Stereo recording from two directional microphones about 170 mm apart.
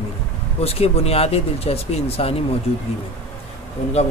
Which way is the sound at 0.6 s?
35° left (ahead or behind).